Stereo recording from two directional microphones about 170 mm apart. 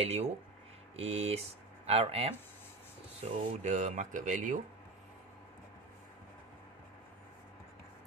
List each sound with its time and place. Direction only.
0.0 s speech: 40° right (ahead or behind)